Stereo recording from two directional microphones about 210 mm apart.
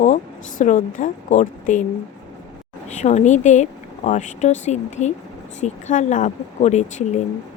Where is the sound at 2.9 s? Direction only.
35° left (ahead or behind).